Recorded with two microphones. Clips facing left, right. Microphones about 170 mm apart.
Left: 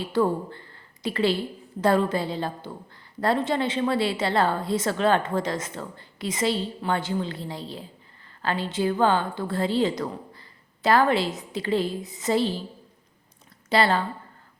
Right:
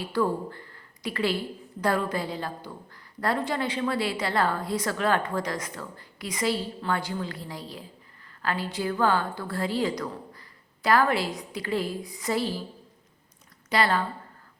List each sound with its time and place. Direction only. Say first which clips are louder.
0.0 s a woman's voice: left 3 dB; 25° left (ahead or behind)
13.7 s a woman's voice: left 3 dB; 30° left (ahead or behind)